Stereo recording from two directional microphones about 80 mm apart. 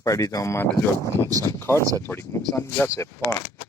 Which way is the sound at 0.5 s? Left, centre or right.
Left.